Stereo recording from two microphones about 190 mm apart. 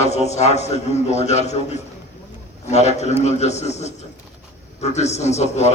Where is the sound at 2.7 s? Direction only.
35° left (ahead or behind).